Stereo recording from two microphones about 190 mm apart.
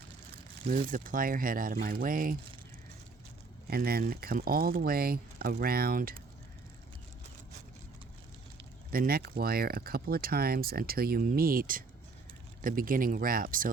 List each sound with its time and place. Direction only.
0.7 s speech: 45° right (ahead or behind)
3.7 s speech: 55° right (ahead or behind)
8.9 s speech: 50° right (ahead or behind)